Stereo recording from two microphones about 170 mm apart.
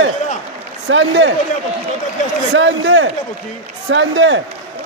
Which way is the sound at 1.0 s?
90° right.